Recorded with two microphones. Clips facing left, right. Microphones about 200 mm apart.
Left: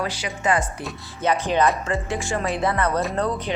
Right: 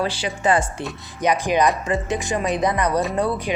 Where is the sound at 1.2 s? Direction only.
15° right (ahead or behind).